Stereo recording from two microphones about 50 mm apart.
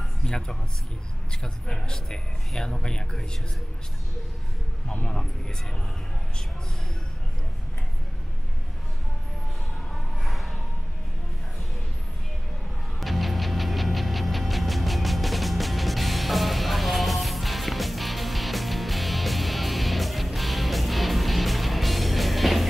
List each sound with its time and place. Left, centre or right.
0.2 s a man's voice: centre
5.0 s a man's voice: centre
10.2 s a sound: centre
13.0 s music: centre